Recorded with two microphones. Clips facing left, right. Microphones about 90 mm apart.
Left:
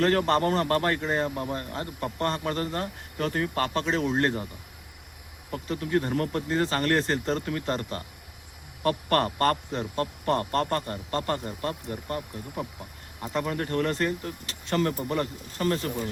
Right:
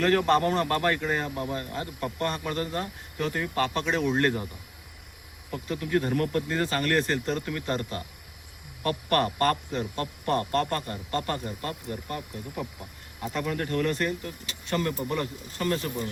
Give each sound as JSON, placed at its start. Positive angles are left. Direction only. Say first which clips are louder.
{"t": 0.0, "sound": "a man's voice", "louder": "even", "side_deg": 40}
{"t": 5.6, "sound": "a man's voice", "louder": "even", "side_deg": 25}
{"t": 13.3, "sound": "a man's voice", "louder": "left 1 dB", "side_deg": 30}